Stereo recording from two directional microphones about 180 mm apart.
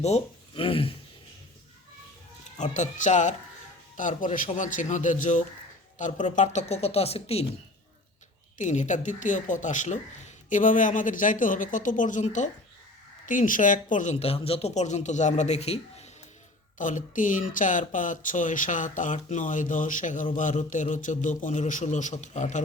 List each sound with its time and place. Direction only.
0.0 s speech: 35° left (ahead or behind)
2.6 s speech: 40° left (ahead or behind)
8.5 s speech: 40° left (ahead or behind)